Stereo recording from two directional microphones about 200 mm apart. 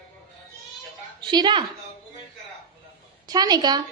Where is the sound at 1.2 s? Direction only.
20° right (ahead or behind).